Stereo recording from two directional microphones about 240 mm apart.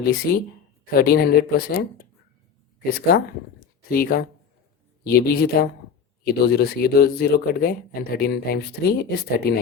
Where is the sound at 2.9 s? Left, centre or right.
Left.